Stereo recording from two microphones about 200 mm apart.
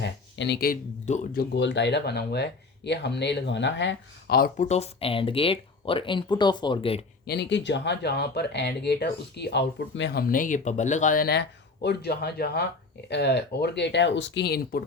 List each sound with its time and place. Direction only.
0.0 s speech: 60° left (ahead or behind); by 7.0 s 25° left (ahead or behind)
7.3 s speech: 60° left (ahead or behind)